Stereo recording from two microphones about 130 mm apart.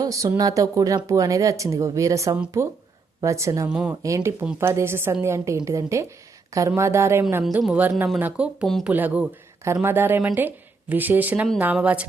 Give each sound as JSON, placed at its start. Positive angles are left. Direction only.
{"t": 0.0, "sound": "speech", "side_deg": -25}
{"t": 3.7, "sound": "speech", "side_deg": -5}
{"t": 4.0, "sound": "speech", "side_deg": -25}